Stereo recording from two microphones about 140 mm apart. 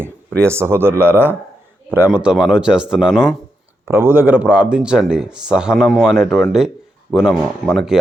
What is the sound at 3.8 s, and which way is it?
Speech, 15° right (ahead or behind).